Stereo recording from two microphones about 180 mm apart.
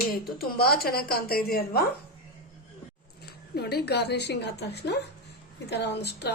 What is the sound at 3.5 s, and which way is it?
A woman's voice, 60° left (ahead or behind).